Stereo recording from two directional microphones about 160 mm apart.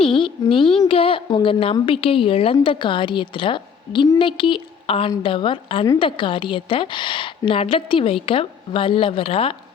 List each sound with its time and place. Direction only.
0.0 s a woman's voice: 35° left (ahead or behind)